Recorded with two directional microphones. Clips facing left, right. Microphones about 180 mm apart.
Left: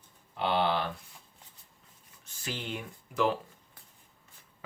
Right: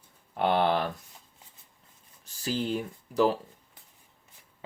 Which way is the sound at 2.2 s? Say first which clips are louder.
Right 8 dB; 35° right (ahead or behind).